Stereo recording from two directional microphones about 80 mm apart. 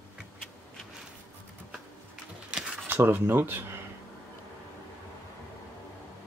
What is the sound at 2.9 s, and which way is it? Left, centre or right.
Speech, right.